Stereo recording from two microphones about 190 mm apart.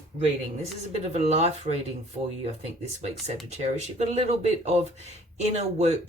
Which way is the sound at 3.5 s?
35° right (ahead or behind).